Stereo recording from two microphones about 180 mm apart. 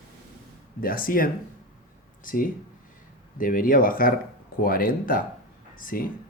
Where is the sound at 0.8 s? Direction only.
50° left (ahead or behind).